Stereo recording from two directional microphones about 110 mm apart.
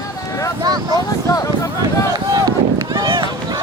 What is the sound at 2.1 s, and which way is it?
Run, 35° right (ahead or behind).